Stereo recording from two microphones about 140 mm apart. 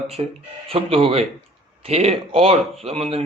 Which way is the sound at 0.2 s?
40° right (ahead or behind).